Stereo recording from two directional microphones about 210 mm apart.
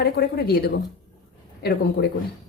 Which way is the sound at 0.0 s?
50° left (ahead or behind).